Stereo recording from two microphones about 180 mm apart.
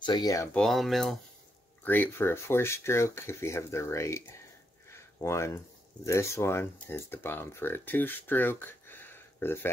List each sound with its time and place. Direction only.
0.0 s speech: 25° left (ahead or behind)
0.5 s speech: 5° left (ahead or behind)
1.9 s speech: 10° left (ahead or behind)
5.2 s speech: 15° left (ahead or behind)